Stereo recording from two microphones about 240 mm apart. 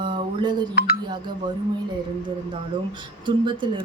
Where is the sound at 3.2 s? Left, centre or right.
Centre.